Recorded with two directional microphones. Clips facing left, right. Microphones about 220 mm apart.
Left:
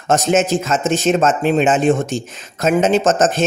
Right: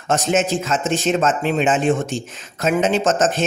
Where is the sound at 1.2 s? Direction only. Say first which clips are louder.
Left 4 dB; 45° left (ahead or behind).